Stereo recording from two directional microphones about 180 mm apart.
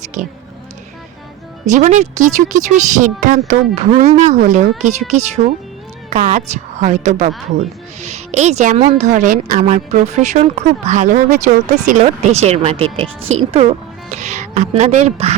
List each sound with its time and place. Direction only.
1.6 s a woman's voice: 40° right (ahead or behind)